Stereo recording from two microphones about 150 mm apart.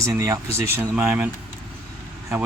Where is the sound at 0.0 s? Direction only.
20° right (ahead or behind).